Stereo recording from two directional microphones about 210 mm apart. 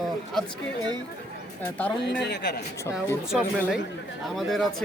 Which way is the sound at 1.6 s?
5° left (ahead or behind).